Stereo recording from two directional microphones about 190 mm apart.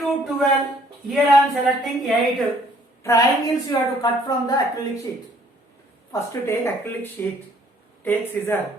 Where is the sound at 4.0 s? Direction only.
20° left (ahead or behind).